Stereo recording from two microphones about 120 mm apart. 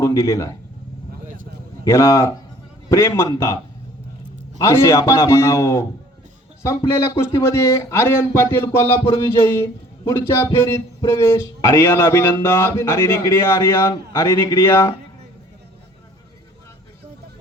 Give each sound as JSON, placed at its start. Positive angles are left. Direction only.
{"t": 0.0, "sound": "speech", "side_deg": 25}
{"t": 1.8, "sound": "speech", "side_deg": 25}